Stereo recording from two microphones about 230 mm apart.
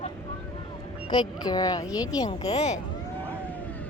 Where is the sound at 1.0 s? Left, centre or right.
Centre.